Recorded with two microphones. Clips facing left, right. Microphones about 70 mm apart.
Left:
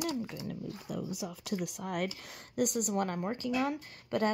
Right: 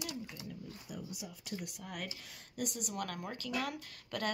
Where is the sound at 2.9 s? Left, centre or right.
Left.